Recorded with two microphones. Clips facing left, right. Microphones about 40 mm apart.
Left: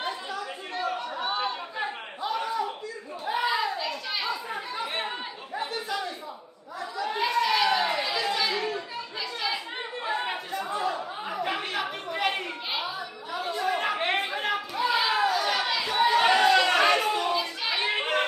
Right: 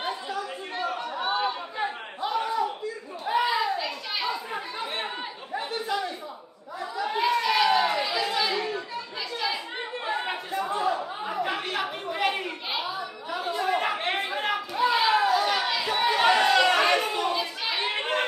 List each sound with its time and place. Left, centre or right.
3.4 s children playing: centre
7.2 s chatter: centre